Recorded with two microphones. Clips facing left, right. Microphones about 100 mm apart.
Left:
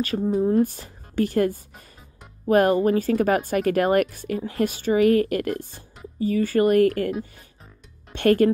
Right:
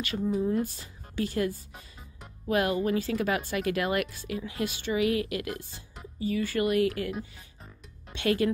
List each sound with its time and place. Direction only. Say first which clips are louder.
0.0 s speech: left 6 dB; 40° left (ahead or behind)
0.7 s speech: left 4 dB; 55° left (ahead or behind)
2.4 s a woman's voice: left 8 dB; 40° left (ahead or behind)